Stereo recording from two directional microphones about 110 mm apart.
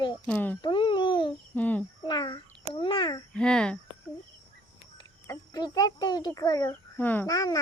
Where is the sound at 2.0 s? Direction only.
45° left (ahead or behind).